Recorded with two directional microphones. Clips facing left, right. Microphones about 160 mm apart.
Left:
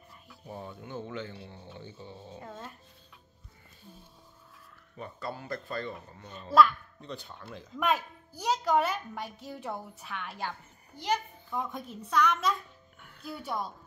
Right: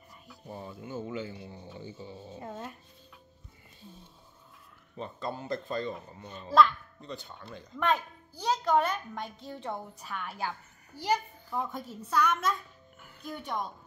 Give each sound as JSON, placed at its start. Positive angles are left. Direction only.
{"t": 0.3, "sound": "speech", "side_deg": 0}
{"t": 4.9, "sound": "speech", "side_deg": -25}
{"t": 6.2, "sound": "a child's voice", "side_deg": -5}
{"t": 13.0, "sound": "music", "side_deg": -5}
{"t": 13.3, "sound": "speech", "side_deg": 5}